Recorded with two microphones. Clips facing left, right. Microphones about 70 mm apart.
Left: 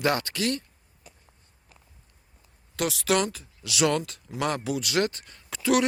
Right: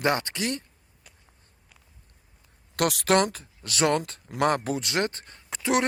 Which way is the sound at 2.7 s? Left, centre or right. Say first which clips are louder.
Right 3 dB; right.